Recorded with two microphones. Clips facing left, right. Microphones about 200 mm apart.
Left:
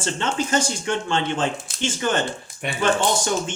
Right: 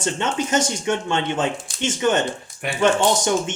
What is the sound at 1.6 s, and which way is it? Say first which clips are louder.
Speech: right 1 dB; centre (ahead or behind).